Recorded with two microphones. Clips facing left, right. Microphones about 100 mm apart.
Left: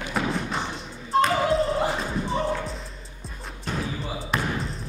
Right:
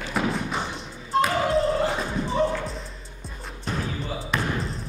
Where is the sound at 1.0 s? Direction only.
Centre (ahead or behind).